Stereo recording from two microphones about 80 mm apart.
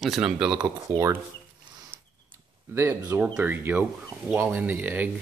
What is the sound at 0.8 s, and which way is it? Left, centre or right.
Speech, right.